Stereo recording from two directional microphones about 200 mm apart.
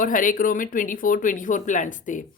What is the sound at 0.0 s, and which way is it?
Speech, 40° left (ahead or behind).